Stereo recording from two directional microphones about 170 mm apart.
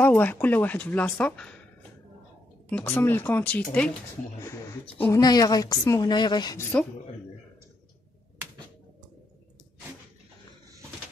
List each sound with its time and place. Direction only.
0.0 s speech: 10° left (ahead or behind)
2.7 s speech: 10° left (ahead or behind)
4.9 s speech: 10° left (ahead or behind)
5.2 s a woman's voice: 25° left (ahead or behind)